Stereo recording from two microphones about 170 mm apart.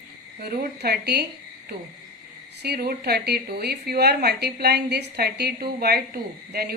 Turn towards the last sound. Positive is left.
turn(degrees=-65)  # may be behind; listen again after turning